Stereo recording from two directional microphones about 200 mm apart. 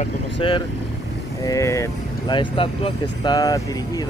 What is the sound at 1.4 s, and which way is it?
Speech, 15° left (ahead or behind).